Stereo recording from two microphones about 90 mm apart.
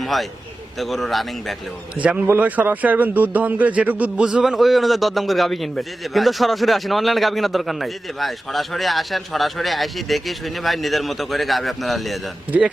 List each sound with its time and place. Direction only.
0.0 s a man's voice: centre (ahead or behind)
2.0 s a man's voice: 15° right (ahead or behind); by 12.2 s centre (ahead or behind)
12.5 s a man's voice: 15° right (ahead or behind)